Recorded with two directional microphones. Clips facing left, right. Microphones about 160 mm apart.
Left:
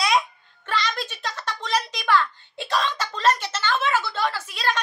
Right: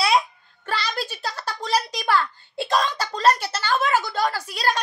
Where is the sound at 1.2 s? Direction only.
35° right (ahead or behind).